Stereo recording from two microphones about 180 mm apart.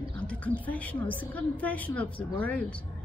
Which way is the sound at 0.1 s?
5° left (ahead or behind).